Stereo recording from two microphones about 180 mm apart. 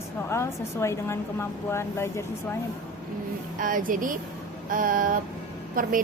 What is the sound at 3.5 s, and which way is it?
A woman's voice, 50° right (ahead or behind).